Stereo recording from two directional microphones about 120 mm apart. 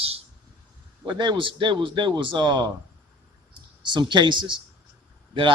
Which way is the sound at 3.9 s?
40° right (ahead or behind).